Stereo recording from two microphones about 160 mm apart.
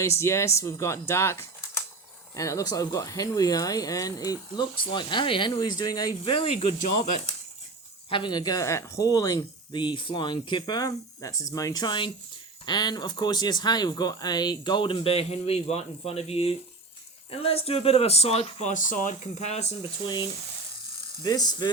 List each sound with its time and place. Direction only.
0.0 s speech: 15° left (ahead or behind); by 6.7 s 35° left (ahead or behind)
6.7 s speech: 50° left (ahead or behind)
8.1 s speech: 30° left (ahead or behind); by 19.7 s 45° left (ahead or behind)
21.2 s speech: 25° left (ahead or behind)